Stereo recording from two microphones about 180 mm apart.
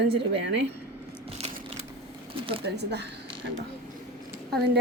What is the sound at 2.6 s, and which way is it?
Speech, 70° right (ahead or behind).